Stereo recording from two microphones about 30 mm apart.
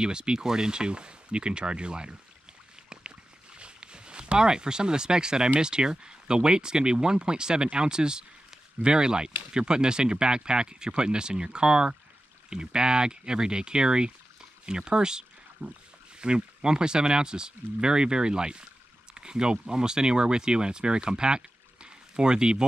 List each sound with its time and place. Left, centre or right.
0.0 s speech: right
3.5 s a sound: right
5.6 s speech: right